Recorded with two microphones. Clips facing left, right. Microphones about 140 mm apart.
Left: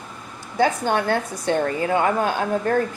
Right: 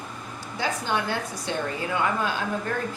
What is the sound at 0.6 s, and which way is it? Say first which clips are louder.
A woman's voice: left 7 dB; 50° left (ahead or behind).